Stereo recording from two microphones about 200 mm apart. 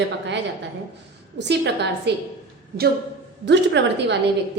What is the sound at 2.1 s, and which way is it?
Speech, 55° right (ahead or behind).